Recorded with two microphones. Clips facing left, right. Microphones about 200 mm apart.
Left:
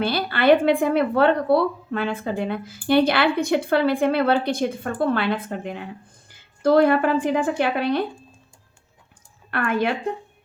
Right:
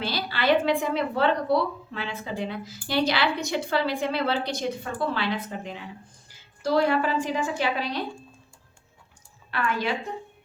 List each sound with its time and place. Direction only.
0.0 s a woman's voice: 55° left (ahead or behind)
9.5 s a woman's voice: 55° left (ahead or behind)